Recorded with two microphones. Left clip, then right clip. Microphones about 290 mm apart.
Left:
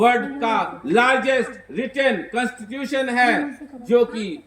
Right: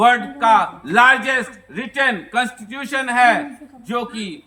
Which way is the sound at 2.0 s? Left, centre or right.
Right.